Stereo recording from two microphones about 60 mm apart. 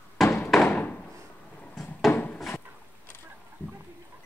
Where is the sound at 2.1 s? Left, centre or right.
Left.